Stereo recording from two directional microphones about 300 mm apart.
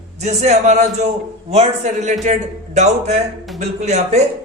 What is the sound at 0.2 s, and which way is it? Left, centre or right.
A man's voice, right.